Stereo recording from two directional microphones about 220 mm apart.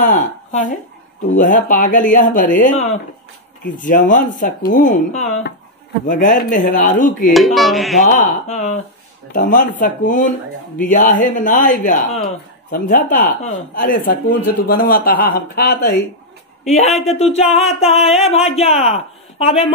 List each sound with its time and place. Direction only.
0.1 s speech: 35° left (ahead or behind)
7.3 s speech: centre (ahead or behind)
8.0 s speech: 35° left (ahead or behind)